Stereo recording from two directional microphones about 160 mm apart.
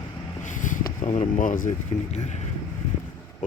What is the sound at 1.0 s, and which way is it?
Speech, 50° left (ahead or behind).